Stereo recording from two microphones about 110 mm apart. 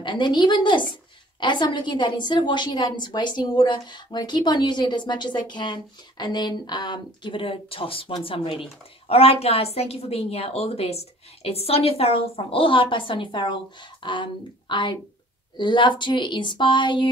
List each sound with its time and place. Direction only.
0.0 s a woman's voice: 45° left (ahead or behind)